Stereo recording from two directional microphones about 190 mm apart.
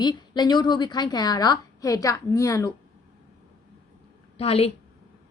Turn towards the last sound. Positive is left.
turn(degrees=30)  # may be behind; listen again after turning